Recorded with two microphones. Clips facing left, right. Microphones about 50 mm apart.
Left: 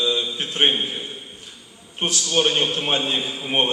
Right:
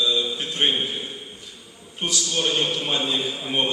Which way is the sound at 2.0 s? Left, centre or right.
Left.